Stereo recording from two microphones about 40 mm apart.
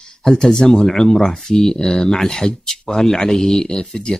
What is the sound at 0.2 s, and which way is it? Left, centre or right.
Speech, centre.